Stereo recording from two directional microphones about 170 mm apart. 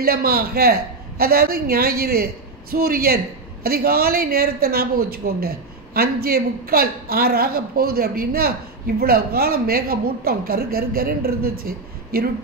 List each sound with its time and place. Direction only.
0.0 s a man's voice: 60° right (ahead or behind)